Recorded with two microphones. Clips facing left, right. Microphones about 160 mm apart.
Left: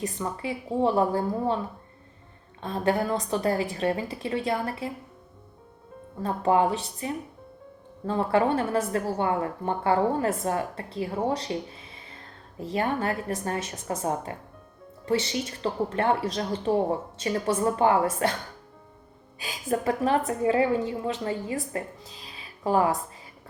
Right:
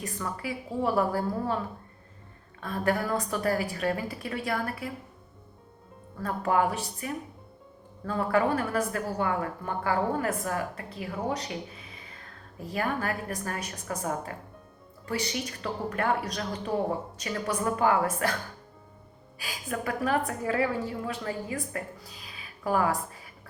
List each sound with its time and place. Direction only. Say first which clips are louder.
0.0 s a woman's voice: left 4 dB; 25° left (ahead or behind)
2.6 s a woman's voice: left 3 dB; 25° left (ahead or behind)
6.1 s a woman's voice: left 3 dB; 25° left (ahead or behind)
19.4 s a woman's voice: left 6 dB; 25° left (ahead or behind)